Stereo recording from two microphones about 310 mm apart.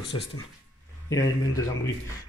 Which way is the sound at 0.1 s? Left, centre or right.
Centre.